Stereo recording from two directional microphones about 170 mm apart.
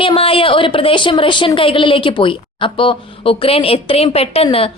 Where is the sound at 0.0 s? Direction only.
30° left (ahead or behind).